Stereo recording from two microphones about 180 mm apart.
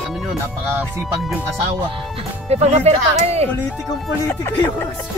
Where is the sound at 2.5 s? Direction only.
35° right (ahead or behind).